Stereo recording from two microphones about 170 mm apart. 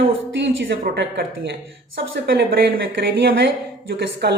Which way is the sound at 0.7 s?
90° right.